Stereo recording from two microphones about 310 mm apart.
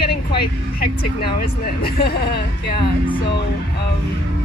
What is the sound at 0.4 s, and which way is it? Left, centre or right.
Speech, left.